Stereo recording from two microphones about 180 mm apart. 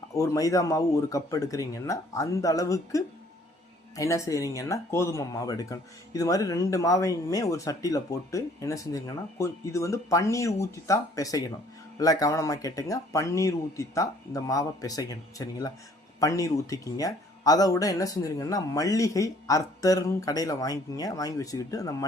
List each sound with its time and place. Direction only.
0.1 s speech: 20° left (ahead or behind)